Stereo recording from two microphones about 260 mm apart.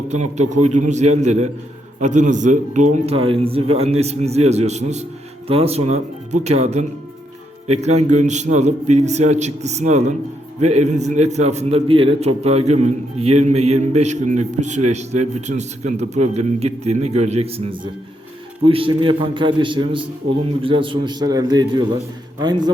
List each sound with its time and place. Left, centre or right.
0.1 s a man's voice: right